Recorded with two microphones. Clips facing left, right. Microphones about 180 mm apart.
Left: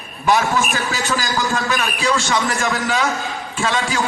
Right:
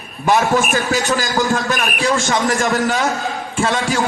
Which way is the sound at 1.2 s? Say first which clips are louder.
Right 3 dB; 45° right (ahead or behind).